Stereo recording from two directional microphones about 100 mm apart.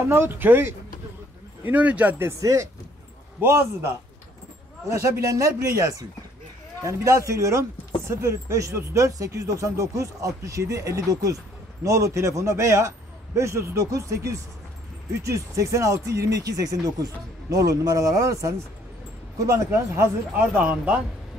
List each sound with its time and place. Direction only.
0.1 s speech: 20° right (ahead or behind)
2.4 s speech: 35° right (ahead or behind); by 21.0 s 15° right (ahead or behind)